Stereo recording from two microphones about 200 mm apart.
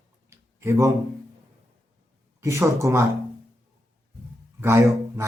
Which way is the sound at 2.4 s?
15° right (ahead or behind).